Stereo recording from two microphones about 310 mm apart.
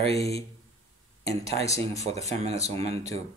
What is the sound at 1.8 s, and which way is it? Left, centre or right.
Speech, right.